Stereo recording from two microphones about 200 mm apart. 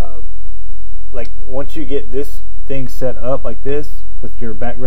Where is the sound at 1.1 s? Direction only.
20° right (ahead or behind).